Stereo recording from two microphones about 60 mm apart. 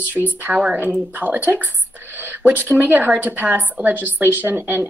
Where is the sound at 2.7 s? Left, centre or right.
Right.